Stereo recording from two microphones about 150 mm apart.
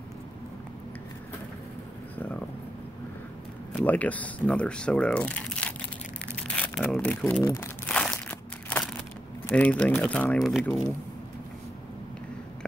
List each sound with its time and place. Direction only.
3.8 s speech: 10° left (ahead or behind)
7.4 s speech: 20° left (ahead or behind)
7.8 s crumpling: 5° left (ahead or behind)
9.5 s speech: 10° left (ahead or behind)